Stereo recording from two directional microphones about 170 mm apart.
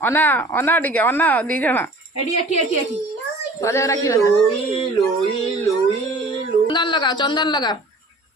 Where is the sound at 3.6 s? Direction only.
15° left (ahead or behind).